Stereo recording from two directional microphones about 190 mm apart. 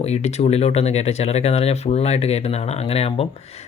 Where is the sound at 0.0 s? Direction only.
35° left (ahead or behind).